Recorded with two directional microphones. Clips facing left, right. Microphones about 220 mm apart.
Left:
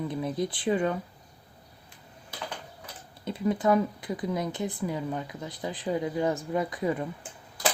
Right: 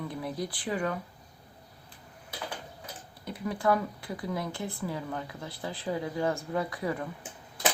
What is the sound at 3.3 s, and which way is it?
Speech, 25° left (ahead or behind).